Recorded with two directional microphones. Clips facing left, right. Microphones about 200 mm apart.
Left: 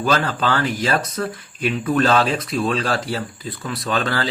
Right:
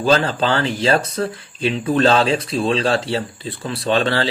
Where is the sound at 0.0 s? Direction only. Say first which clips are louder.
Right 3 dB; 30° right (ahead or behind).